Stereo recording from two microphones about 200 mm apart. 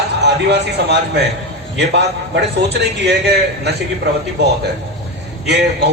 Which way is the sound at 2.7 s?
60° right (ahead or behind).